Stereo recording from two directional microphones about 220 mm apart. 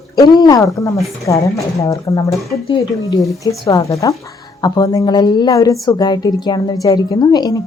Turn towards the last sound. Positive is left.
turn(degrees=20)  # may be behind; listen again after turning